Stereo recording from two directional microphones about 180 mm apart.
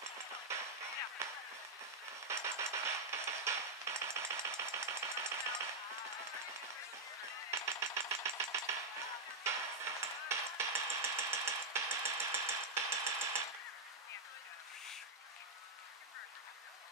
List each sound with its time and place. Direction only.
0.0 s music: 15° right (ahead or behind)
2.2 s a sound: 15° right (ahead or behind)
7.5 s chopping: 15° right (ahead or behind)
9.4 s hammer: 15° right (ahead or behind)